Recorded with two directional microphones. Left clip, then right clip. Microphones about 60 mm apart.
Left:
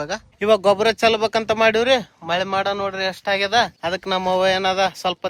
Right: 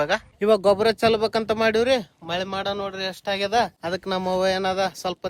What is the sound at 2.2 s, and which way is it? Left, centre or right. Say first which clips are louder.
Speech: left 6 dB; left.